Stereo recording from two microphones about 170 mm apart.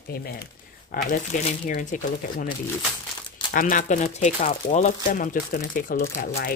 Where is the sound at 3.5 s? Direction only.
55° left (ahead or behind).